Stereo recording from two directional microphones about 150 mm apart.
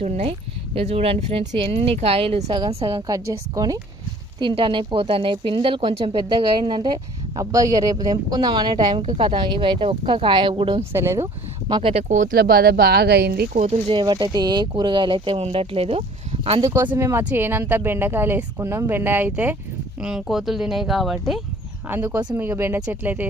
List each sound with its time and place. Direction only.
0.0 s a woman's voice: 45° right (ahead or behind)
10.9 s speech: 15° right (ahead or behind)
11.7 s speech: 35° right (ahead or behind)
12.0 s speech: 55° right (ahead or behind); by 13.5 s 90° right
13.5 s speech: 45° right (ahead or behind)
14.0 s speech: 30° right (ahead or behind)
17.0 s speech: 20° right (ahead or behind); by 21.4 s centre (ahead or behind)
21.8 s speech: 15° right (ahead or behind)